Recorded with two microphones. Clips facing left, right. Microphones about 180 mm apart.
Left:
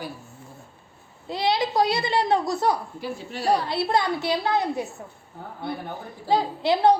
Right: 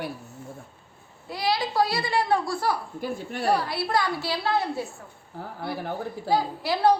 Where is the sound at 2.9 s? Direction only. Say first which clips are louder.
Right 1 dB; 50° right (ahead or behind).